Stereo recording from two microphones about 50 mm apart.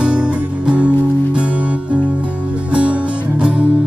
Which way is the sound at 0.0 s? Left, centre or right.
Right.